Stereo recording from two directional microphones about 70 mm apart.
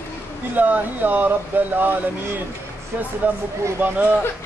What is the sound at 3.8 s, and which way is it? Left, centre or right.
Speech, right.